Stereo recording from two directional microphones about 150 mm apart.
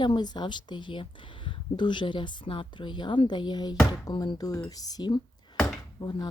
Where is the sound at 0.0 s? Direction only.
30° left (ahead or behind).